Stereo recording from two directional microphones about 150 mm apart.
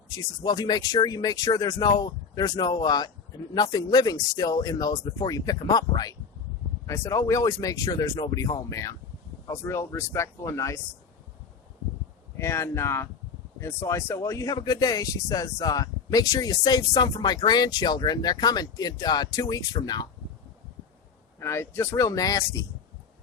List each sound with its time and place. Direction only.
0.1 s speech: 25° left (ahead or behind)
12.4 s speech: 20° left (ahead or behind)
21.3 s speech: 15° left (ahead or behind)